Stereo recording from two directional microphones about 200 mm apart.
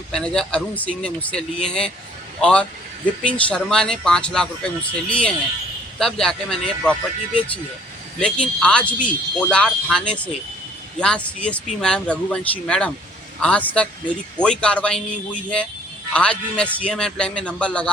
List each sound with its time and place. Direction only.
0.1 s speech: 5° left (ahead or behind)
16.1 s speech: 5° left (ahead or behind)